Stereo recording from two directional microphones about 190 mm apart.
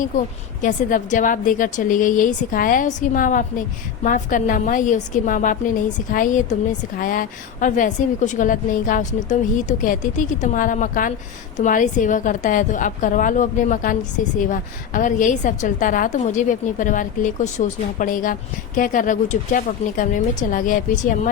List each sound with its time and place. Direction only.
0.1 s a woman's voice: 40° left (ahead or behind)